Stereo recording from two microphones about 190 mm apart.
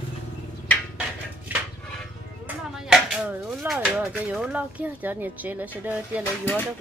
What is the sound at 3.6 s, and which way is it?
Speech, 5° right (ahead or behind).